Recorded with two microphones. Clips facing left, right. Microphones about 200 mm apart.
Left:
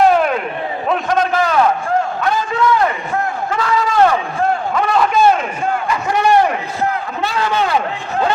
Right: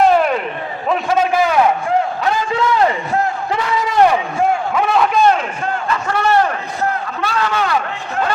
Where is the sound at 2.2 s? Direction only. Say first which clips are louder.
Left 1 dB; 20° right (ahead or behind); by 5.5 s 5° left (ahead or behind).